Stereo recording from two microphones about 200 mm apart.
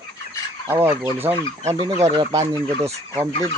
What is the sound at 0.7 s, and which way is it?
Fowl, 10° right (ahead or behind).